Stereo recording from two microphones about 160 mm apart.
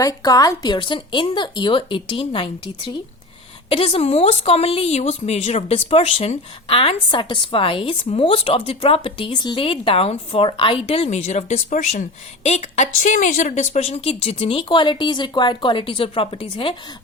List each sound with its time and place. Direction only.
0.0 s a woman's voice: 20° left (ahead or behind)